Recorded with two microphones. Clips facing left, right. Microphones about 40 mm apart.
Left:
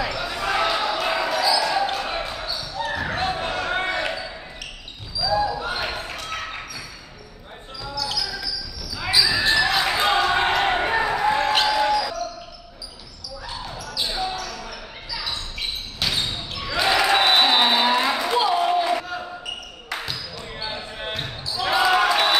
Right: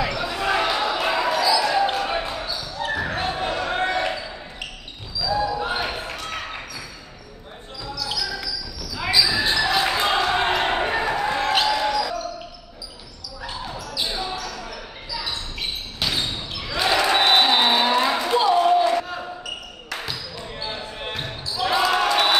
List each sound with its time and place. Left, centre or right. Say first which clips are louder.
0.0 s basketball bounce: right 2 dB; centre
5.2 s basketball bounce: left 1 dB; centre
7.9 s basketball bounce: left 1 dB; centre
9.1 s basketball bounce: left 1 dB; centre
13.4 s basketball bounce: right 2 dB; centre
13.9 s basketball bounce: left 1 dB; centre
16.0 s basketball bounce: even; centre
16.7 s a sound: left 1 dB; centre
20.7 s basketball bounce: even; centre